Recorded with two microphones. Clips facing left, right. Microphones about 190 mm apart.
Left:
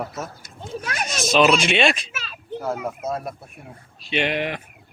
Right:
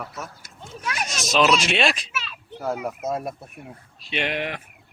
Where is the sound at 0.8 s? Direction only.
45° left (ahead or behind).